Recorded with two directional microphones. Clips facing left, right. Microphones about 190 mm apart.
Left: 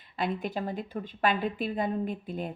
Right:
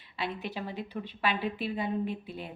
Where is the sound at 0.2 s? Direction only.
50° left (ahead or behind).